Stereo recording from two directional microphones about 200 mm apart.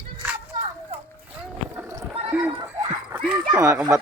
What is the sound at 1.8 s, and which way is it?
Splash, 15° right (ahead or behind).